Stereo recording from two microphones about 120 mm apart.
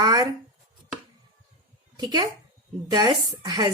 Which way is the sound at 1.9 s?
35° right (ahead or behind).